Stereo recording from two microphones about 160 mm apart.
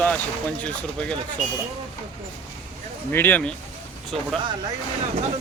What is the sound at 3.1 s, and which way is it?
Speech, 10° left (ahead or behind).